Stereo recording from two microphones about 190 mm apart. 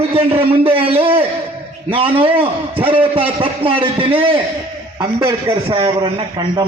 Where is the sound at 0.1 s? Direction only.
30° right (ahead or behind).